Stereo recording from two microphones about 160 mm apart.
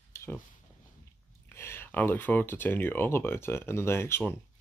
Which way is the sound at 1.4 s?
15° left (ahead or behind).